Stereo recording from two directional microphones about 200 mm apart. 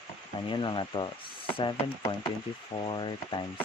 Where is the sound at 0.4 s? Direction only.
25° left (ahead or behind).